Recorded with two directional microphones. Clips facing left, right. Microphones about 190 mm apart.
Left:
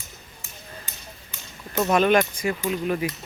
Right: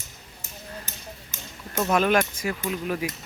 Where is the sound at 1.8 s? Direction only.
Centre (ahead or behind).